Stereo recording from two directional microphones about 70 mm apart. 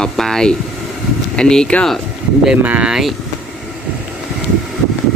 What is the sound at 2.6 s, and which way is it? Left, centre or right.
Speech, right.